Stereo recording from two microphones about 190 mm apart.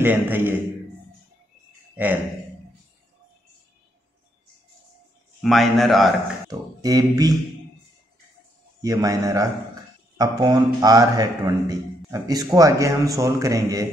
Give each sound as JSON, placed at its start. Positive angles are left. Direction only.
{"t": 0.0, "sound": "a man's voice", "side_deg": -10}
{"t": 5.4, "sound": "a man's voice", "side_deg": 0}
{"t": 6.8, "sound": "a man's voice", "side_deg": -20}
{"t": 8.8, "sound": "a man's voice", "side_deg": -20}